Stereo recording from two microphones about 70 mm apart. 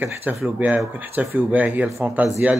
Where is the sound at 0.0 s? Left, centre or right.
Right.